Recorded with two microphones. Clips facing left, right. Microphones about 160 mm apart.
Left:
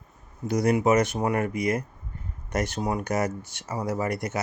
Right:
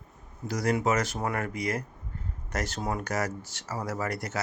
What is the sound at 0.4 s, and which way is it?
Speech, 20° left (ahead or behind).